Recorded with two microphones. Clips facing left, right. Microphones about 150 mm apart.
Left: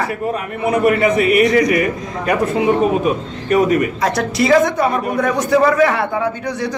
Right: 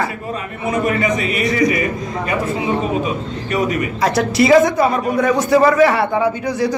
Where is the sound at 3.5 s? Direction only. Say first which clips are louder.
Left 5 dB; 50° left (ahead or behind).